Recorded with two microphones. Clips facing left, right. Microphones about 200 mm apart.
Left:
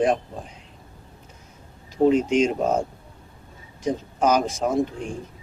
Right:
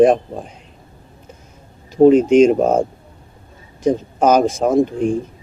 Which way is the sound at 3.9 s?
50° right (ahead or behind).